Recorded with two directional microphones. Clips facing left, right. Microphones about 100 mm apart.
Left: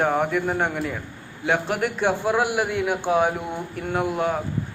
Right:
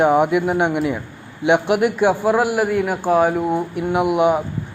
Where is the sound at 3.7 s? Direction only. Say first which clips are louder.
Right 7 dB; 15° right (ahead or behind).